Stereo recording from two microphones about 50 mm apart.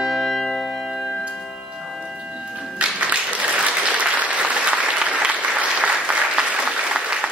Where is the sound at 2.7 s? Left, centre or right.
Right.